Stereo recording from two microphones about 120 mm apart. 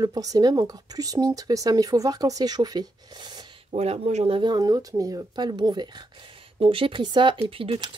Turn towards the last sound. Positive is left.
turn(degrees=-50)  # may be behind; listen again after turning